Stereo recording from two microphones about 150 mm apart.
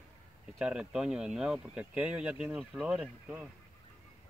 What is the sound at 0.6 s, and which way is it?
Speech, 5° right (ahead or behind).